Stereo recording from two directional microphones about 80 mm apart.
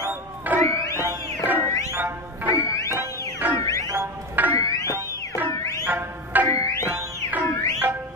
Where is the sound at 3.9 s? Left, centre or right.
Right.